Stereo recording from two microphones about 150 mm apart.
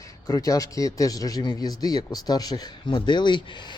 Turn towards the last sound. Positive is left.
turn(degrees=30)  # may be behind; listen again after turning